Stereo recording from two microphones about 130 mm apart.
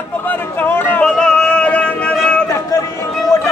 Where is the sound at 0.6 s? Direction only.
15° left (ahead or behind).